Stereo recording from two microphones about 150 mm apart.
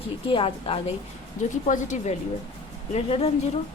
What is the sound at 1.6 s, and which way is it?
Speech, 55° left (ahead or behind).